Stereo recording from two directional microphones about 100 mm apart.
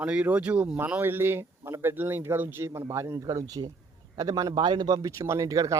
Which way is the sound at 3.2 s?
40° right (ahead or behind).